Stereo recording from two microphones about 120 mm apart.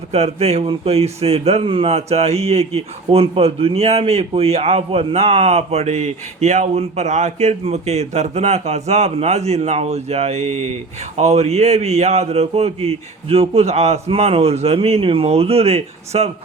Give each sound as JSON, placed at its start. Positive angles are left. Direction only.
{"t": 0.1, "sound": "speech", "side_deg": -60}